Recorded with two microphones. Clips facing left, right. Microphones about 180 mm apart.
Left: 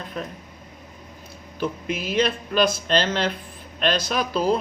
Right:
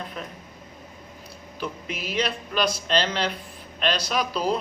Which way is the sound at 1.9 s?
50° left (ahead or behind).